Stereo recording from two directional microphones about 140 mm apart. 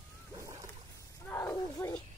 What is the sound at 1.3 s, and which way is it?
Roaring cats, 20° left (ahead or behind).